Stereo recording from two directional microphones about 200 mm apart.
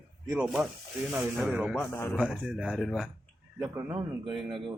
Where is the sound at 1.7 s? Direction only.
10° left (ahead or behind).